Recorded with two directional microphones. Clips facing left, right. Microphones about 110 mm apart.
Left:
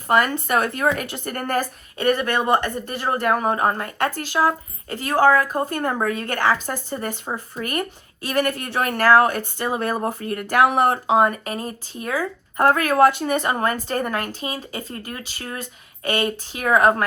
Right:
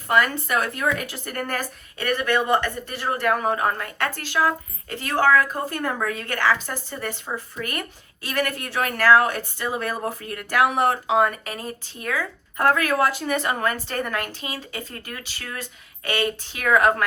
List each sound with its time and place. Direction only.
0.1 s speech: 40° left (ahead or behind)
13.2 s speech: 40° left (ahead or behind)